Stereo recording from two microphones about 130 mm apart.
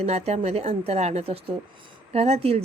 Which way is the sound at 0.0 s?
55° right (ahead or behind).